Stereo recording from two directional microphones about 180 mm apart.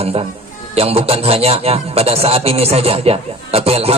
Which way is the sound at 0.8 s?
35° right (ahead or behind).